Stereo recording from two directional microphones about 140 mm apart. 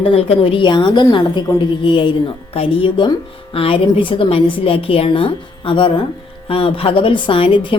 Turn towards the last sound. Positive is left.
turn(degrees=40)  # may be behind; listen again after turning